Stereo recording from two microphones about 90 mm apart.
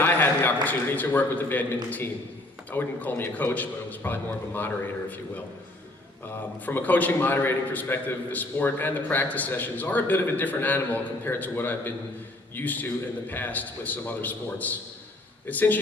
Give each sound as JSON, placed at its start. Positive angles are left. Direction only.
{"t": 0.0, "sound": "a man's voice", "side_deg": 20}
{"t": 6.7, "sound": "a man's voice", "side_deg": 20}